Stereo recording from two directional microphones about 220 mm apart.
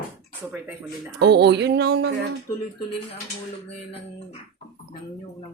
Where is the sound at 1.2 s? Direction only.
50° right (ahead or behind).